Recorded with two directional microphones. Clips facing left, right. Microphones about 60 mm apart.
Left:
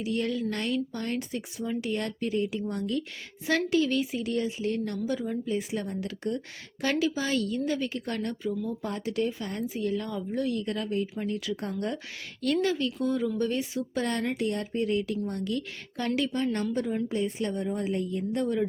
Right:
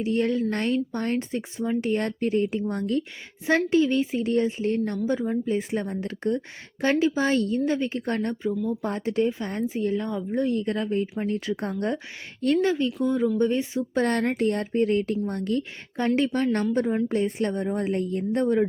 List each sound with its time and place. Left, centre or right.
0.0 s speech: right
14.0 s a woman's voice: right